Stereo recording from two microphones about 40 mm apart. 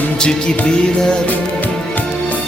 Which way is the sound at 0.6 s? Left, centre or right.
Left.